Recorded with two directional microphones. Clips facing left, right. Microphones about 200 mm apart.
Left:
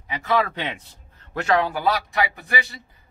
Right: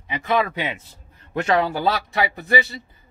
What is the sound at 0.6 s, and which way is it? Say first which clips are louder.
Speech: right 2 dB; centre (ahead or behind).